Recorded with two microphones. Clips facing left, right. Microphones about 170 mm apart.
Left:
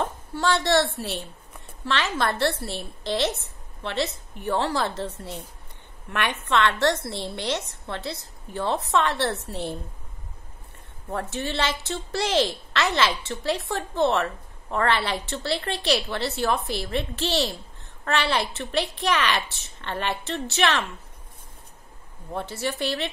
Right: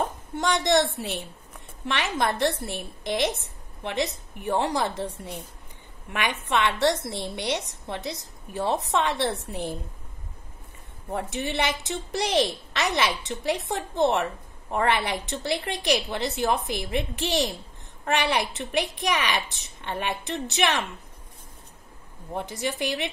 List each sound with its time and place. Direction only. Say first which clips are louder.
0.4 s a woman's voice: left 1 dB; 15° right (ahead or behind)
11.1 s a woman's voice: even; 15° right (ahead or behind)
22.3 s a woman's voice: left 1 dB; 15° right (ahead or behind)